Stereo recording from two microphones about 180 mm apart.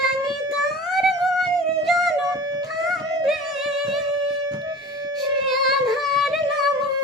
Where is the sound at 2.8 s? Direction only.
Centre (ahead or behind).